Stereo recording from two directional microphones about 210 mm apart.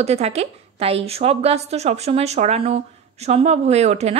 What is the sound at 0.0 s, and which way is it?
A woman's voice, 30° right (ahead or behind).